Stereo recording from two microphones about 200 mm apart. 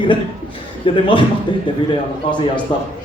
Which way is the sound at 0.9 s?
25° left (ahead or behind).